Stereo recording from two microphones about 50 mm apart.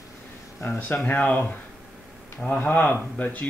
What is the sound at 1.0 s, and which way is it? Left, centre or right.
Speech, left.